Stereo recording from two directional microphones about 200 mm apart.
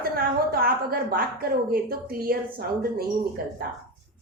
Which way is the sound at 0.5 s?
50° right (ahead or behind).